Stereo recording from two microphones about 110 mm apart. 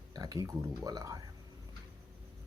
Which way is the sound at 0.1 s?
35° right (ahead or behind).